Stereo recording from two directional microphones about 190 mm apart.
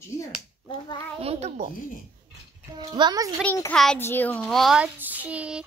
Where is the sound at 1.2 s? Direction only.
35° right (ahead or behind).